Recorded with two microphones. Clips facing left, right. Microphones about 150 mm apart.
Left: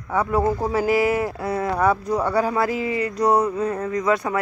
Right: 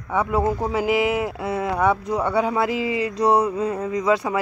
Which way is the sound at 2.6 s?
25° right (ahead or behind).